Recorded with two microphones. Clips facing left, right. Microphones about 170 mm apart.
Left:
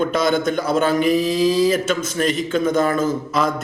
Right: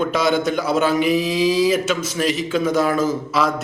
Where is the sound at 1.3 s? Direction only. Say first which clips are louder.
Left 1 dB; 50° left (ahead or behind).